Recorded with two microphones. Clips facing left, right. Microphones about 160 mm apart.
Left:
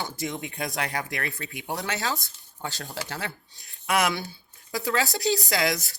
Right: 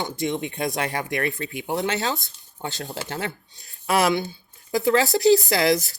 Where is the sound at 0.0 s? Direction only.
20° right (ahead or behind).